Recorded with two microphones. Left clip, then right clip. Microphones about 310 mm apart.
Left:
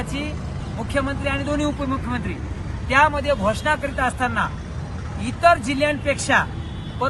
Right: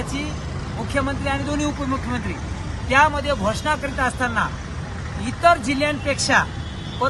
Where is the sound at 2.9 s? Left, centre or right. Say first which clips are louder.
Even; centre.